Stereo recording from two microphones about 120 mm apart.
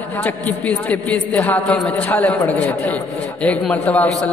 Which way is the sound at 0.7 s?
10° left (ahead or behind).